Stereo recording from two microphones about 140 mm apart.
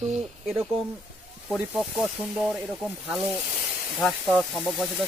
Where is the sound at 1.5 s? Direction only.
5° right (ahead or behind).